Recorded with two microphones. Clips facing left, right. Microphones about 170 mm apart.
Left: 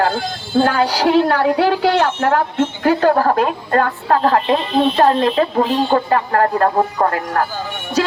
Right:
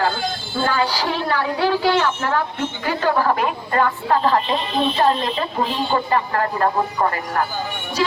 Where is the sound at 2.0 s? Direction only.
55° left (ahead or behind).